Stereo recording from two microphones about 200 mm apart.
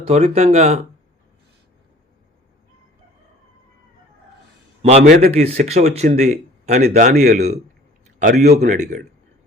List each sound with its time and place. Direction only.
0.1 s speech: 30° right (ahead or behind)
4.8 s a man's voice: 35° right (ahead or behind)